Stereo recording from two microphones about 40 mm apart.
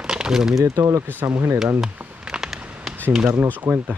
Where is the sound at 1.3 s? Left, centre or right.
Right.